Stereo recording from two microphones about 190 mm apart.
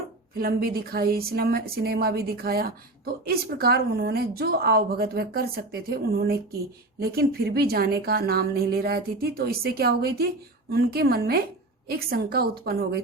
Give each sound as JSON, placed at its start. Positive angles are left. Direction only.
{"t": 0.3, "sound": "a woman's voice", "side_deg": -50}